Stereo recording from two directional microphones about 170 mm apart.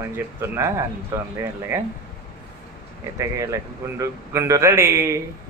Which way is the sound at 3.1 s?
20° right (ahead or behind).